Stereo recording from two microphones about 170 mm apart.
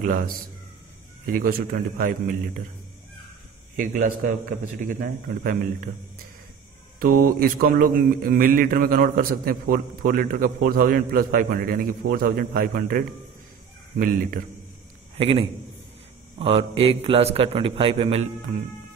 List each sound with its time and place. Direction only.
0.0 s a man's voice: 55° right (ahead or behind)
3.7 s a man's voice: 50° right (ahead or behind)
7.0 s speech: 55° right (ahead or behind)
15.1 s a man's voice: 35° right (ahead or behind)